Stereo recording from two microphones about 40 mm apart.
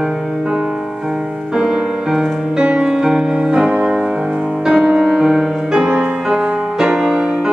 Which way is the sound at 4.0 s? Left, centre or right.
Centre.